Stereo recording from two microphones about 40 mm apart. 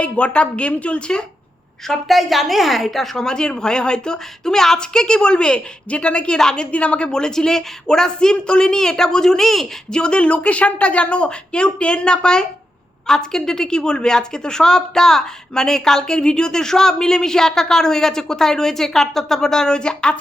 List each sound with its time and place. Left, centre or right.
0.0 s speech: left
1.9 s a woman's voice: centre
3.2 s a woman's voice: centre
6.7 s a woman's voice: left
7.1 s a woman's voice: centre
9.9 s a woman's voice: left